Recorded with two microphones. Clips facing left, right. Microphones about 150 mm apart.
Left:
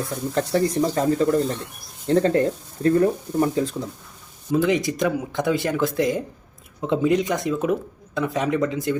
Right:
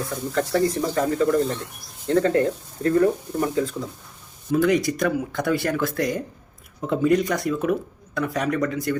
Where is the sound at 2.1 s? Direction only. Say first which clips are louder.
Left 1 dB; 30° left (ahead or behind).